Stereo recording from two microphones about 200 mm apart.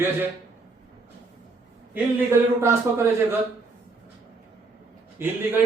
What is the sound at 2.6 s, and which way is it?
Speech, 15° right (ahead or behind).